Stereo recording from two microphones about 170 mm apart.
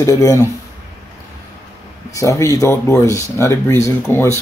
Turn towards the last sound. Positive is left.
turn(degrees=15)  # may be behind; listen again after turning